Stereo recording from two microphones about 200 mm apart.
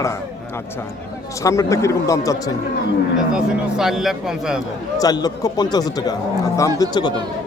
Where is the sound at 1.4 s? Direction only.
15° left (ahead or behind).